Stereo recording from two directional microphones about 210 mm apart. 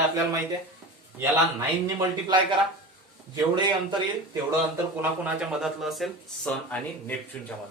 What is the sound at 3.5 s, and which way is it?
Speech, 20° right (ahead or behind).